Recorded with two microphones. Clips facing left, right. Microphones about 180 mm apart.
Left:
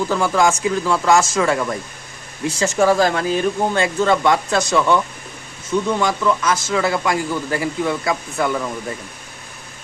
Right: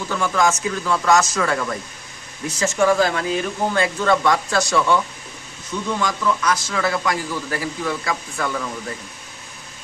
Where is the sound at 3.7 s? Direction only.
25° left (ahead or behind).